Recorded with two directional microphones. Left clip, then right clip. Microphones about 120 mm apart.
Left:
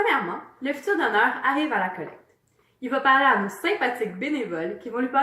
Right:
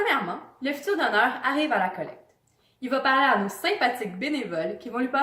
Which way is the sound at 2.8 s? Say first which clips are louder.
Left 3 dB; 30° right (ahead or behind).